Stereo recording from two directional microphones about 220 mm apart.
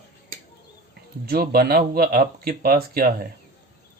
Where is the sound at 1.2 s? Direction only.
45° right (ahead or behind).